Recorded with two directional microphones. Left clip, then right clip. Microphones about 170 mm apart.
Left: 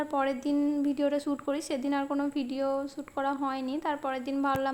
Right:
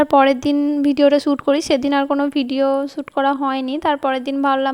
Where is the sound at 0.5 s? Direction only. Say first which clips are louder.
Right 11 dB; 35° right (ahead or behind).